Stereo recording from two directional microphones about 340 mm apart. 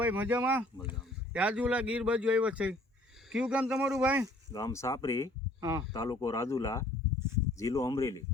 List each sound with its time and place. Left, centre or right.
0.0 s speech: centre
4.5 s speech: centre
5.5 s speech: centre
5.9 s speech: centre